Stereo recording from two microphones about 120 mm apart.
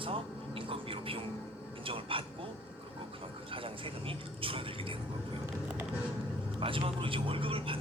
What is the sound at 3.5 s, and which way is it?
Vehicle, 50° right (ahead or behind).